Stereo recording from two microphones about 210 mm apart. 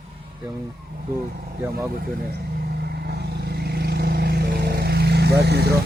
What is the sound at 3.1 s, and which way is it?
Vehicle, 50° right (ahead or behind).